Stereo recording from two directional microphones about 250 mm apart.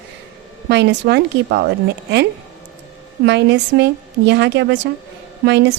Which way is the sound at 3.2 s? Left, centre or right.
Right.